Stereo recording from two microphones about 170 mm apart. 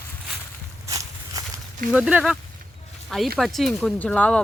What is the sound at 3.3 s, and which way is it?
Speech, centre (ahead or behind).